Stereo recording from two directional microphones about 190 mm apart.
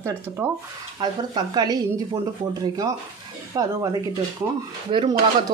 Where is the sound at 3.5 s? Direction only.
20° right (ahead or behind).